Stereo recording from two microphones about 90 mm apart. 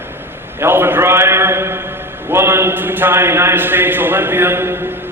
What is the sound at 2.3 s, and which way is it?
A man's voice, 30° right (ahead or behind).